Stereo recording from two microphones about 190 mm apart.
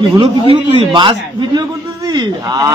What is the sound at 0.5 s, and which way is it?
Speech, 25° right (ahead or behind).